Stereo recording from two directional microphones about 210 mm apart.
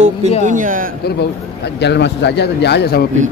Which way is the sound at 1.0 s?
50° left (ahead or behind).